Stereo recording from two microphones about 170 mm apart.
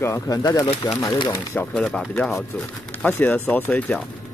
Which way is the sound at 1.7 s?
5° left (ahead or behind).